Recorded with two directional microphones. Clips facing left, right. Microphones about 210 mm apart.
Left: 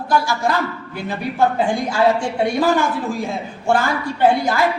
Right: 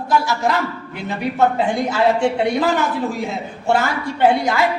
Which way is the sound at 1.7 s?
20° right (ahead or behind).